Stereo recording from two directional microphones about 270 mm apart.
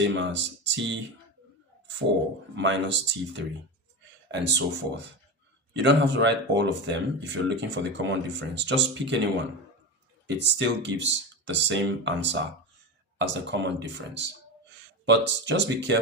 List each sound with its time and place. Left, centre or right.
0.0 s speech: right
2.6 s speech: right
10.2 s speech: right